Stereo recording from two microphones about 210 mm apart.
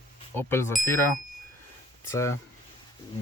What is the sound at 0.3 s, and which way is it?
Speech, 10° left (ahead or behind).